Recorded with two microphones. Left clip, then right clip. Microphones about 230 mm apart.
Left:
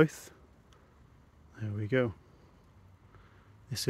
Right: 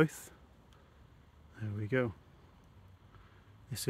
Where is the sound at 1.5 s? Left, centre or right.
Centre.